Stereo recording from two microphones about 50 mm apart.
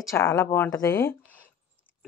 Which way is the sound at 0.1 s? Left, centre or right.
Left.